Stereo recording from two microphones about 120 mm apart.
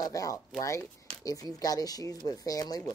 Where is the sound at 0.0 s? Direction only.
30° left (ahead or behind).